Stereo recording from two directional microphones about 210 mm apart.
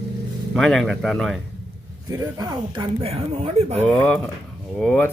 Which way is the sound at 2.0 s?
15° right (ahead or behind).